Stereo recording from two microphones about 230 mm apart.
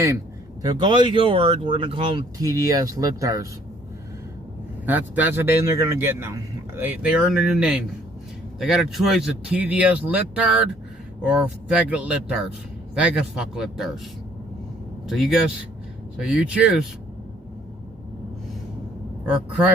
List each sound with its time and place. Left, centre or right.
0.6 s speech: centre
4.9 s speech: centre
15.0 s speech: centre